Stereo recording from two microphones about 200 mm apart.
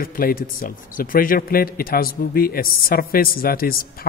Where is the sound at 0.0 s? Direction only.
45° left (ahead or behind).